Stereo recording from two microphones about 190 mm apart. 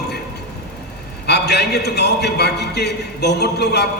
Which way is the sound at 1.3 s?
60° left (ahead or behind).